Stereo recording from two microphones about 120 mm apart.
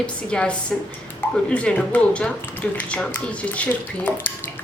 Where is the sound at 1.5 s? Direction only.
10° left (ahead or behind).